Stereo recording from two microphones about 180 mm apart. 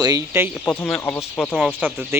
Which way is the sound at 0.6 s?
10° left (ahead or behind).